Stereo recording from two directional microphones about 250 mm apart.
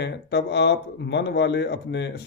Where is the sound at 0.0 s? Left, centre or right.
Left.